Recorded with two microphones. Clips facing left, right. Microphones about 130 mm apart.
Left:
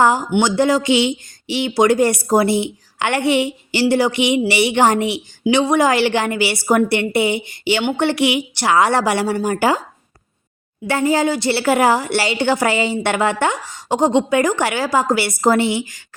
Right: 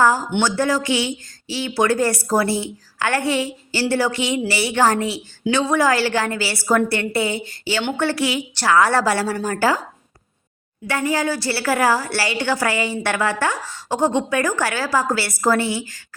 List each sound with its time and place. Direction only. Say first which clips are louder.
0.0 s a woman's voice: left 2 dB; 20° left (ahead or behind)
10.8 s speech: left 4 dB; 25° left (ahead or behind)